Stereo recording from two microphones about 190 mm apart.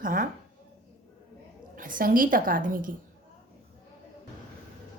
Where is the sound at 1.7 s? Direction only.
45° right (ahead or behind).